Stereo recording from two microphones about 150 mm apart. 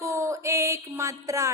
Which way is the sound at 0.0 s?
20° right (ahead or behind).